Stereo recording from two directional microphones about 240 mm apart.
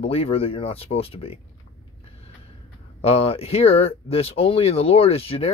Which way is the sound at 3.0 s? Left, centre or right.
Left.